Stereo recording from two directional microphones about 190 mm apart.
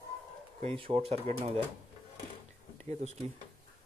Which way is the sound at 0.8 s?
30° right (ahead or behind).